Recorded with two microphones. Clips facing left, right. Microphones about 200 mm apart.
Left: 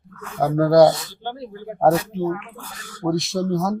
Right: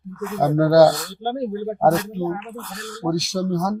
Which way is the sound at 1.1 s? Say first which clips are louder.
Right 7 dB; 45° right (ahead or behind).